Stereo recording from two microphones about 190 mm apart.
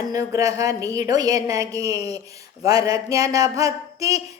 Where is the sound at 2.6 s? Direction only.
20° right (ahead or behind).